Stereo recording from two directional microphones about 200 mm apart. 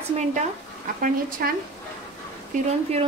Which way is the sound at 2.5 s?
30° right (ahead or behind).